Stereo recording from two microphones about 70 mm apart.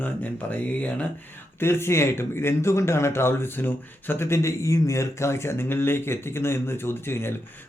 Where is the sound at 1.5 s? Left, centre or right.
Left.